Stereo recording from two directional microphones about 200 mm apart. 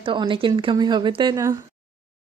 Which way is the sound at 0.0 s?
25° right (ahead or behind).